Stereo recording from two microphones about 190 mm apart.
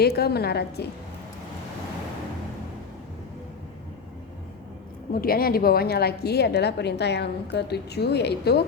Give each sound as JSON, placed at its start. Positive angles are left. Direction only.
{"t": 0.0, "sound": "a woman's voice", "side_deg": 55}
{"t": 5.1, "sound": "a woman's voice", "side_deg": 50}